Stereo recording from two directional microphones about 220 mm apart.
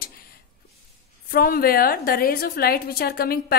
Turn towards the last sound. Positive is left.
turn(degrees=45)  # may be behind; listen again after turning